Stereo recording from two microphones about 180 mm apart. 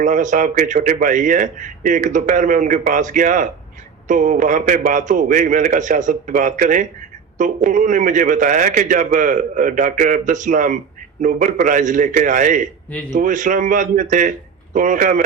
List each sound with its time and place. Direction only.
0.0 s speech: 45° right (ahead or behind)